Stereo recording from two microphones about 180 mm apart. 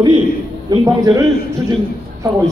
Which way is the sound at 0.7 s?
20° right (ahead or behind).